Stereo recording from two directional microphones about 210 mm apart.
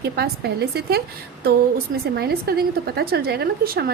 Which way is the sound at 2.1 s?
45° right (ahead or behind).